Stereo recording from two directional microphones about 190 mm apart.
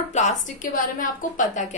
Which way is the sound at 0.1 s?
40° left (ahead or behind).